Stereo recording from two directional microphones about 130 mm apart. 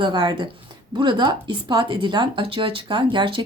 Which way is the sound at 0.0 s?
35° right (ahead or behind).